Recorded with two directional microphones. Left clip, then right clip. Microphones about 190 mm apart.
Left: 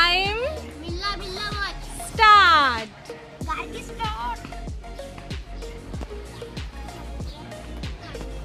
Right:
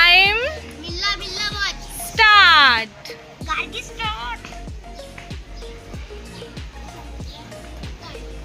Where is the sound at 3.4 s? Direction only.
65° left (ahead or behind).